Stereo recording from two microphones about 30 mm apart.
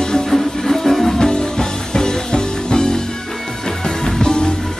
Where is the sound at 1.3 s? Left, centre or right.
Left.